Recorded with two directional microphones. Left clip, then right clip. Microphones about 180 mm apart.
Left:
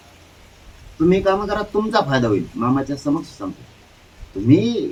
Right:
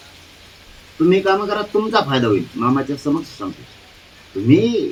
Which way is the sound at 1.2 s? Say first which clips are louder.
Right 1 dB; 20° left (ahead or behind).